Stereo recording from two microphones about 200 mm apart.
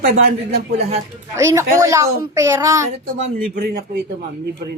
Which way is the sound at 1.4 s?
15° right (ahead or behind).